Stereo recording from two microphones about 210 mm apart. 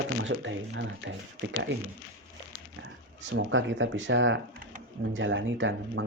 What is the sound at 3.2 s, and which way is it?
Speech, 65° right (ahead or behind).